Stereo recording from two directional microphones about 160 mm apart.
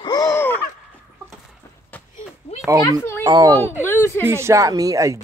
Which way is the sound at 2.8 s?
15° left (ahead or behind).